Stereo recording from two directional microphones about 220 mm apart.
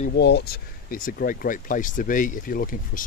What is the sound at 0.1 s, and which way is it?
Speech, 50° left (ahead or behind).